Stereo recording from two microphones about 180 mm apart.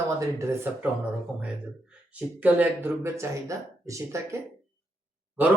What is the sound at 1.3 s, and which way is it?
Speech, 5° right (ahead or behind).